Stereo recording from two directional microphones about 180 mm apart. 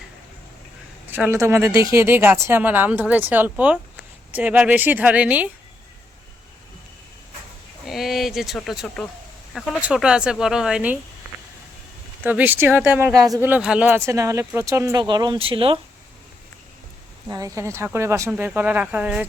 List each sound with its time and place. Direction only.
1.0 s speech: 10° right (ahead or behind)
7.9 s speech: centre (ahead or behind)
12.2 s speech: 10° right (ahead or behind); by 15.8 s 30° right (ahead or behind)
17.2 s speech: 20° right (ahead or behind)